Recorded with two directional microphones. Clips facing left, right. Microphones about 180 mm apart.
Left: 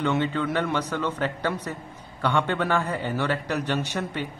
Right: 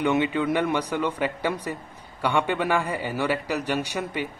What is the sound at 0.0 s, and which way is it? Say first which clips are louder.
Speech: right 2 dB; 15° right (ahead or behind).